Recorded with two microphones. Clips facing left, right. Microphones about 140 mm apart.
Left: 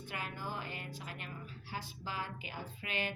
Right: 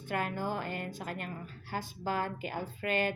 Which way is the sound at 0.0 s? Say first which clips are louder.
Right 9 dB; 50° right (ahead or behind).